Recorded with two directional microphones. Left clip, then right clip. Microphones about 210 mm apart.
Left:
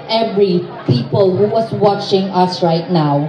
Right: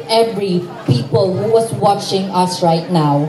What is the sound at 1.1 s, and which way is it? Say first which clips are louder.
Speech: even; 40° right (ahead or behind).